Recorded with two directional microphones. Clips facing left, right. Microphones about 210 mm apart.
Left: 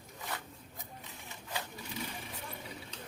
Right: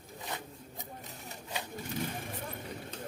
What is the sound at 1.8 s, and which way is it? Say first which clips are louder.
Vehicle: right 5 dB; 50° right (ahead or behind).